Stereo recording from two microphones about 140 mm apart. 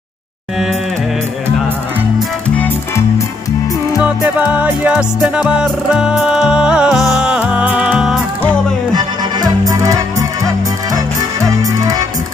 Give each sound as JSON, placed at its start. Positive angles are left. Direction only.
{"t": 4.0, "sound": "music", "side_deg": -10}
{"t": 8.9, "sound": "music", "side_deg": -25}